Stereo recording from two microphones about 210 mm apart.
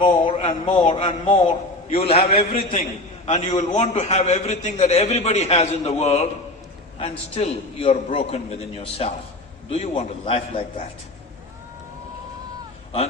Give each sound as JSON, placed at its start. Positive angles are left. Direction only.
{"t": 0.0, "sound": "a man's voice", "side_deg": 30}